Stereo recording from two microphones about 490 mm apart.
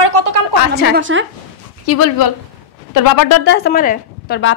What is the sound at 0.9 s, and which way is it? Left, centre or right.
Speech, right.